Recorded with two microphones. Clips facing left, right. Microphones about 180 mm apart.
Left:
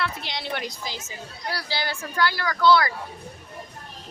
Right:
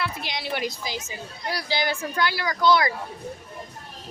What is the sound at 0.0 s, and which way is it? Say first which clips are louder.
A woman's voice: even; 10° right (ahead or behind).